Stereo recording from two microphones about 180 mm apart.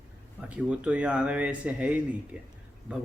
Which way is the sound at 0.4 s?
5° right (ahead or behind).